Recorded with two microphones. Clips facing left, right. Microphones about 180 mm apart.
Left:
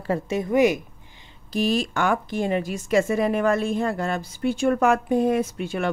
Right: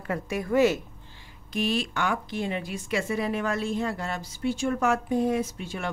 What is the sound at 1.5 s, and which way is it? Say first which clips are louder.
A woman's voice: left 5 dB; 40° left (ahead or behind).